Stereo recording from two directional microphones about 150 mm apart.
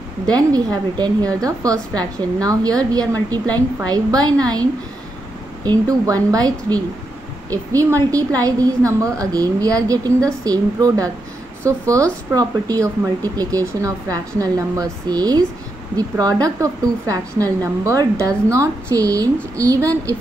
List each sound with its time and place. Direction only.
0.3 s a woman's voice: 25° right (ahead or behind)